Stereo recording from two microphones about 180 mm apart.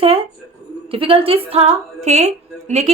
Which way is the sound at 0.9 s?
30° right (ahead or behind).